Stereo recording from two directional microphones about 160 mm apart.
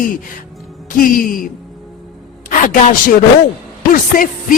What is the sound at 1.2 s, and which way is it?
Speech, 60° left (ahead or behind).